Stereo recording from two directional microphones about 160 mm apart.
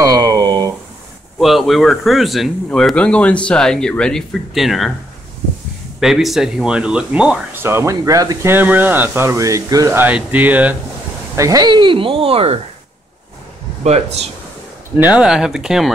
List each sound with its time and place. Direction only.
0.0 s a sound: 25° right (ahead or behind)
1.4 s speech: centre (ahead or behind)
5.9 s speech: 5° right (ahead or behind)
7.6 s speech: 15° right (ahead or behind)
11.3 s speech: 20° right (ahead or behind)
13.8 s speech: 40° right (ahead or behind)
15.0 s speech: 5° right (ahead or behind)